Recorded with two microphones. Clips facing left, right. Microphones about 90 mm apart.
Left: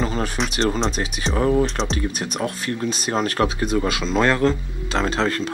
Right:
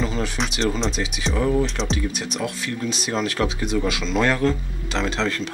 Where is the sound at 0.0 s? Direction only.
45° left (ahead or behind).